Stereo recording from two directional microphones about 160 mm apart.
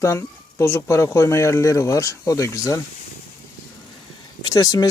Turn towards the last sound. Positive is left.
turn(degrees=20)  # may be behind; listen again after turning